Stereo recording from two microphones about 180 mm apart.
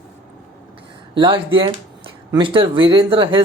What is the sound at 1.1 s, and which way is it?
Speech, 30° right (ahead or behind).